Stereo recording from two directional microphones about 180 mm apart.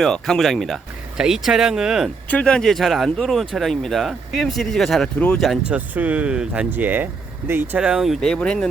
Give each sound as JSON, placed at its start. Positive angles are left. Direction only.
{"t": 0.0, "sound": "speech", "side_deg": 0}